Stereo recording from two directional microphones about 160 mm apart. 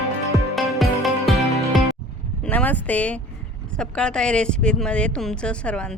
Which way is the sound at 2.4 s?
10° left (ahead or behind).